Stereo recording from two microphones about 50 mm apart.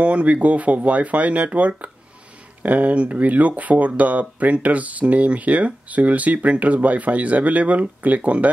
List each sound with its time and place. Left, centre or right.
0.0 s speech: right